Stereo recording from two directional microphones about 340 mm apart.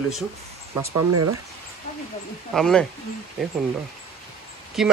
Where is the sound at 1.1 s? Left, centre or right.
Right.